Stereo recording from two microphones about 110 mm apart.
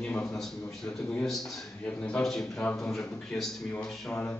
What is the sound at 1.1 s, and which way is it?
A man's voice, 5° left (ahead or behind).